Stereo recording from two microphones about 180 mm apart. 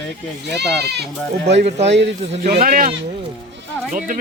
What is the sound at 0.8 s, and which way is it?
Speech, 65° right (ahead or behind).